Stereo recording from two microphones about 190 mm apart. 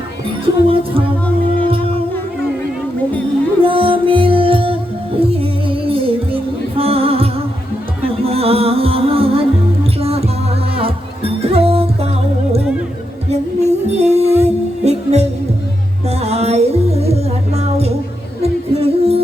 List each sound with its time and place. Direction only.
0.4 s speech: 30° right (ahead or behind)
3.6 s music: 30° right (ahead or behind)
13.3 s music: 35° right (ahead or behind)